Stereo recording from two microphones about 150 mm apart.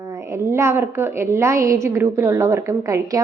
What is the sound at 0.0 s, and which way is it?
A woman's voice, 20° right (ahead or behind).